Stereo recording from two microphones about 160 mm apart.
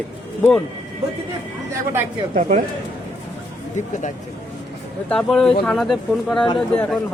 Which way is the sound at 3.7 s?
50° left (ahead or behind).